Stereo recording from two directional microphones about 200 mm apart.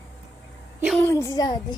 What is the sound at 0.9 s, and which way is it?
Speech, 15° left (ahead or behind).